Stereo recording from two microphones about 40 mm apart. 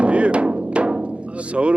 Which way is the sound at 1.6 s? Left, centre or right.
Right.